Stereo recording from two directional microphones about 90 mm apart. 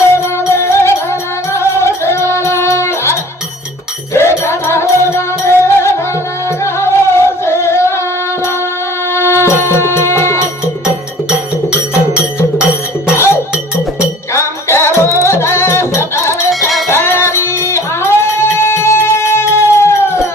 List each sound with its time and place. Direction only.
0.2 s music: 30° left (ahead or behind)
12.1 s music: 25° left (ahead or behind)
16.5 s a sound: centre (ahead or behind)
16.9 s music: 25° left (ahead or behind)